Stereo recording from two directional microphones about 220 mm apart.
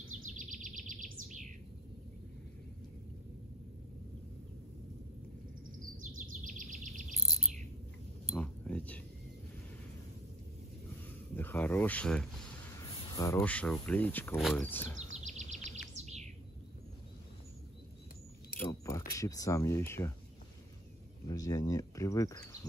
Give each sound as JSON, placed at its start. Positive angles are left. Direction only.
{"t": 0.4, "sound": "bird", "side_deg": -35}
{"t": 5.9, "sound": "bird vocalization", "side_deg": -35}
{"t": 8.4, "sound": "a sound", "side_deg": 5}
{"t": 11.3, "sound": "a sound", "side_deg": 10}
{"t": 13.1, "sound": "speech", "side_deg": 15}
{"t": 15.1, "sound": "bird", "side_deg": -30}
{"t": 18.7, "sound": "a sound", "side_deg": 15}
{"t": 19.1, "sound": "speech", "side_deg": 15}
{"t": 21.3, "sound": "speech", "side_deg": 15}